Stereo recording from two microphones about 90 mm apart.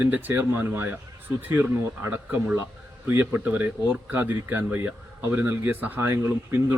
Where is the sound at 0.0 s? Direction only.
20° right (ahead or behind).